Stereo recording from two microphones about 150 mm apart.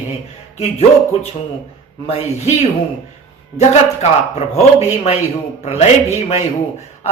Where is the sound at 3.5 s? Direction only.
45° left (ahead or behind).